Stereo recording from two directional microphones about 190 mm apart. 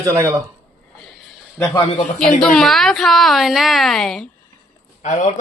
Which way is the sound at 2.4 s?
Centre (ahead or behind).